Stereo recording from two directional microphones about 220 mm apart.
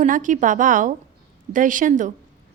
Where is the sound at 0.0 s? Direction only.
35° right (ahead or behind).